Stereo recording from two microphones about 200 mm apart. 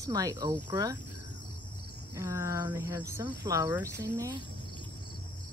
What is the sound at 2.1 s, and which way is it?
Speech, 15° right (ahead or behind).